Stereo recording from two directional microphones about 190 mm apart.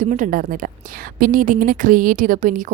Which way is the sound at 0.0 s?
40° right (ahead or behind).